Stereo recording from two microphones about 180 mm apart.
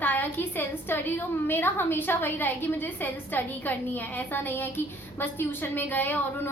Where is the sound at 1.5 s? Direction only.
10° left (ahead or behind).